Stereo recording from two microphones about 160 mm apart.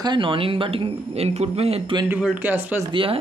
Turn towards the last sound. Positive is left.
turn(degrees=-35)  # may be behind; listen again after turning